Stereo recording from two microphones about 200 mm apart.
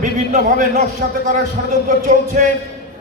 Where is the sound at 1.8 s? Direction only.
40° right (ahead or behind).